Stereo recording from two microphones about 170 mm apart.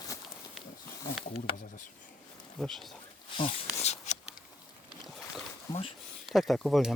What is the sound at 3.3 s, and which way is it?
Speech, 30° left (ahead or behind).